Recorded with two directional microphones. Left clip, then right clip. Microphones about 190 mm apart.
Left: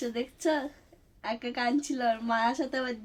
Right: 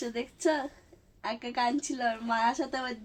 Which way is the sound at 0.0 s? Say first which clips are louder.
Even; centre (ahead or behind).